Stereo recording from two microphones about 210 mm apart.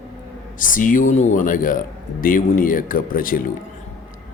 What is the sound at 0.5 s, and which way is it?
Speech, 40° left (ahead or behind).